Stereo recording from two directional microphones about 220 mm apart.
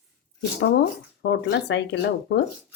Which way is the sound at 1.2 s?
55° left (ahead or behind).